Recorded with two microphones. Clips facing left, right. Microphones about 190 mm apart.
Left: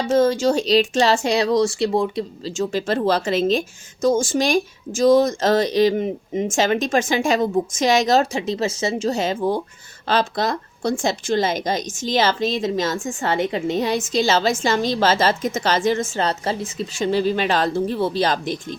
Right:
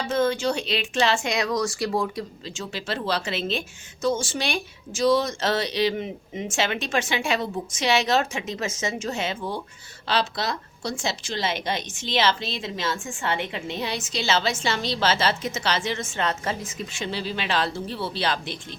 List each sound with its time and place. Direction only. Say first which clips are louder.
0.1 s speech: left 6 dB; 40° left (ahead or behind); by 2.2 s 25° left (ahead or behind)
2.4 s a woman's voice: left 11 dB; 45° left (ahead or behind)